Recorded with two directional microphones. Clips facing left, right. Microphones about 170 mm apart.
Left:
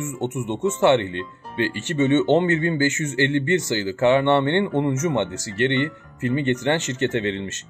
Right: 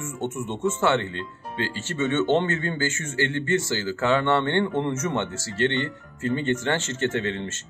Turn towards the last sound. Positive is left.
turn(degrees=20)  # may be behind; listen again after turning